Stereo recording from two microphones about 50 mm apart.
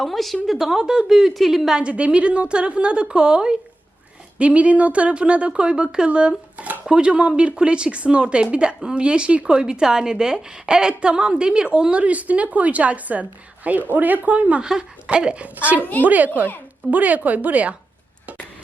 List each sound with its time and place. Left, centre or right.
0.0 s a woman's voice: centre
1.1 s a woman's voice: centre
1.8 s a woman's voice: right
14.6 s speech: centre
15.8 s a woman's voice: left
16.0 s speech: right